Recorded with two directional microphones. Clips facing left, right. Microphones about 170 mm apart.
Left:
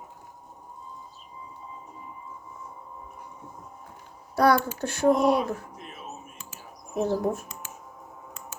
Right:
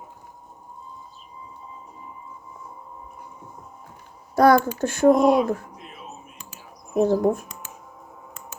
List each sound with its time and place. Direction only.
4.4 s speech: 45° right (ahead or behind)
5.7 s a sound: 45° left (ahead or behind)
6.9 s speech: 50° right (ahead or behind)